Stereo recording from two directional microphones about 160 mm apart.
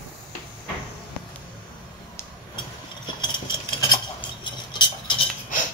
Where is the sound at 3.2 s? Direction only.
25° left (ahead or behind).